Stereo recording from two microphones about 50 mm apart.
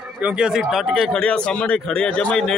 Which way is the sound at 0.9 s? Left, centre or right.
Centre.